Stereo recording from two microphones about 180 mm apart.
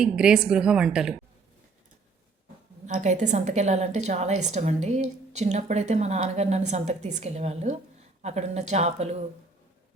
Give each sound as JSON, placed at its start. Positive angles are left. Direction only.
{"t": 0.0, "sound": "a woman's voice", "side_deg": -5}
{"t": 2.8, "sound": "a woman's voice", "side_deg": -40}